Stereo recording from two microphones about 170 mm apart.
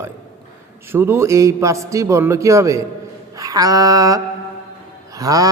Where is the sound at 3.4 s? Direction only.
20° right (ahead or behind).